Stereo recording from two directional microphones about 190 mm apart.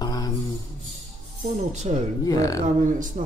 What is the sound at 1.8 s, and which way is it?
Speech, 40° right (ahead or behind).